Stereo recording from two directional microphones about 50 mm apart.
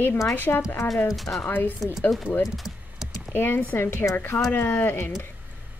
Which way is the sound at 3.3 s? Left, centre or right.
Left.